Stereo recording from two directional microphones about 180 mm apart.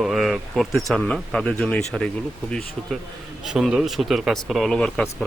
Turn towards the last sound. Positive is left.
turn(degrees=0)  # may be behind; listen again after turning